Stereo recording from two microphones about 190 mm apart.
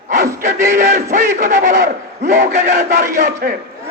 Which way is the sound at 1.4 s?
40° right (ahead or behind).